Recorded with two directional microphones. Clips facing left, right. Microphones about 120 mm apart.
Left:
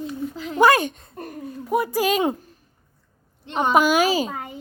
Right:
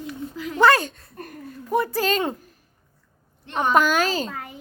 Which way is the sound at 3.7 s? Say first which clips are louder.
Left 2 dB; 10° left (ahead or behind).